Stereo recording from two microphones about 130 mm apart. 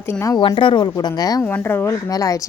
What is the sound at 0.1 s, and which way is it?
Speech, 25° left (ahead or behind).